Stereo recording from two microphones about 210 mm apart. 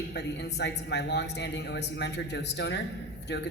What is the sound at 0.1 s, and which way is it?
Speech, 55° left (ahead or behind).